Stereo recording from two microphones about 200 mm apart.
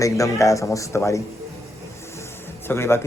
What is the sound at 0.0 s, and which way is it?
Speech, 15° left (ahead or behind).